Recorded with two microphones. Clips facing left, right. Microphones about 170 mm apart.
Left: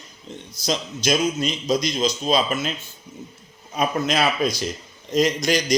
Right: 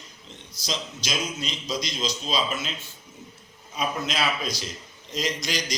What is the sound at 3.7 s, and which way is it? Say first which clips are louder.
Speech: left 7 dB; 50° left (ahead or behind).